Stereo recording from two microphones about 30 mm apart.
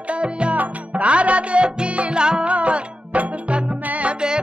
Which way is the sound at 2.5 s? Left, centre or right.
Right.